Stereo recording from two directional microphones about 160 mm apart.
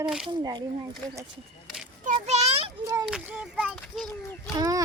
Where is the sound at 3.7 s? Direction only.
5° left (ahead or behind).